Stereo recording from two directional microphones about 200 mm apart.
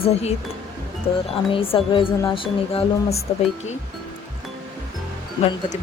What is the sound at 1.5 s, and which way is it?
Speech, 25° left (ahead or behind).